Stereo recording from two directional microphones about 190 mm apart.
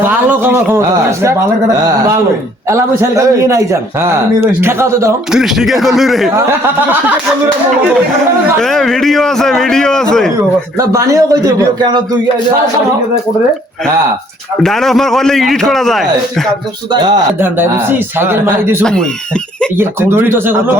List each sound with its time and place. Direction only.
0.3 s a man's voice: 10° right (ahead or behind)
2.6 s a man's voice: 15° right (ahead or behind)
5.3 s a man's voice: centre (ahead or behind)
8.5 s a man's voice: centre (ahead or behind)
10.8 s a man's voice: 15° right (ahead or behind)
14.6 s a man's voice: centre (ahead or behind)
17.4 s a man's voice: 10° right (ahead or behind)
18.8 s a man's voice: 5° left (ahead or behind)
19.7 s a man's voice: 15° right (ahead or behind)